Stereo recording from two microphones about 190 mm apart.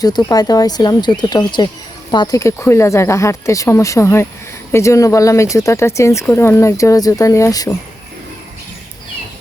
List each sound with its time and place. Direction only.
0.0 s speech: 20° left (ahead or behind)